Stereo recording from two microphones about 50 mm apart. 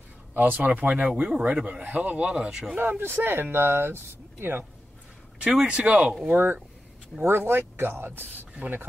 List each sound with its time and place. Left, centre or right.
0.3 s a man's voice: right; by 2.7 s centre
2.8 s speech: right
5.5 s speech: centre
5.8 s a man's voice: right
6.2 s speech: right
7.2 s speech: right